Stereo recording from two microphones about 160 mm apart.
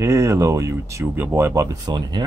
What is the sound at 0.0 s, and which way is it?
Speech, 20° right (ahead or behind).